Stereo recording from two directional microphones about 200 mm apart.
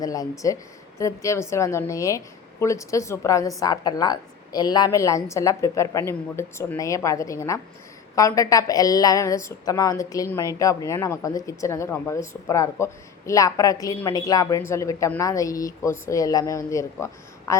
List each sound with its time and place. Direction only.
0.0 s a woman's voice: 20° left (ahead or behind)